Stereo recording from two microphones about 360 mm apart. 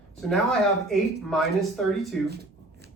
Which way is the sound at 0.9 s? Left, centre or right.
Centre.